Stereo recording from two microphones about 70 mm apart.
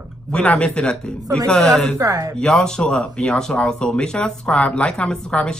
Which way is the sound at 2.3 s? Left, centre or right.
Centre.